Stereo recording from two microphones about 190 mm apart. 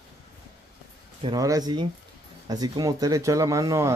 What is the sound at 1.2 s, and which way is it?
Speech, 20° right (ahead or behind).